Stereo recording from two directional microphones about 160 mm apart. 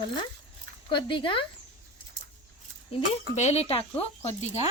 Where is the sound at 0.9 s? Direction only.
30° left (ahead or behind).